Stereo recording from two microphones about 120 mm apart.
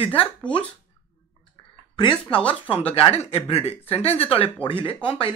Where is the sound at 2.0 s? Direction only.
45° left (ahead or behind).